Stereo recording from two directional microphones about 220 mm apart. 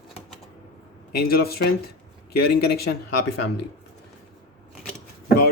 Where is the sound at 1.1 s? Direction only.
45° left (ahead or behind).